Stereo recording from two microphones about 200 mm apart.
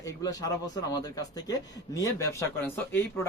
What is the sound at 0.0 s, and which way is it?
Speech, 15° left (ahead or behind).